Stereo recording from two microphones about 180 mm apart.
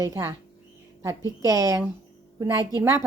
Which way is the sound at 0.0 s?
15° right (ahead or behind).